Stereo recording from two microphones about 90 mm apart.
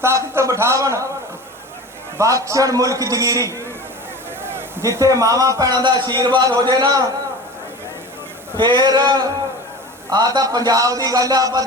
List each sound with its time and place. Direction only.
0.0 s a man's voice: 30° right (ahead or behind)
2.1 s a man's voice: 35° right (ahead or behind)
8.5 s a sound: 55° right (ahead or behind)
10.1 s a man's voice: 45° right (ahead or behind)